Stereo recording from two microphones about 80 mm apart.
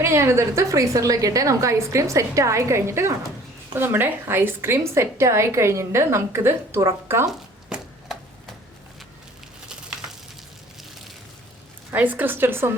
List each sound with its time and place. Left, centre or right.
0.0 s a woman's voice: right
7.3 s a sound: centre
11.9 s a woman's voice: right